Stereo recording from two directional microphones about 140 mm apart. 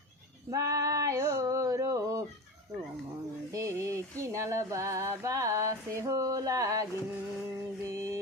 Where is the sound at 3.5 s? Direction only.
20° right (ahead or behind).